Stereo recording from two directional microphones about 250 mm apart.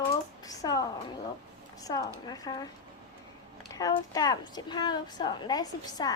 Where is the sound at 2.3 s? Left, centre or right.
Centre.